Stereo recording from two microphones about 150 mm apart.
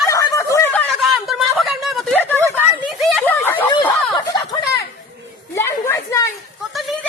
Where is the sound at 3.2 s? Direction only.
15° left (ahead or behind).